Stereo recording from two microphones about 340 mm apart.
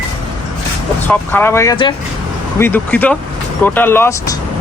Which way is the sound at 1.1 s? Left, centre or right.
Centre.